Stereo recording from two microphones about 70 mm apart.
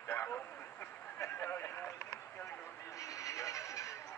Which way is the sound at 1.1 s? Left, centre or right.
Left.